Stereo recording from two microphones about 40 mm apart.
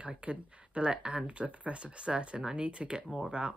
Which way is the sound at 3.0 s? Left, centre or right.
Centre.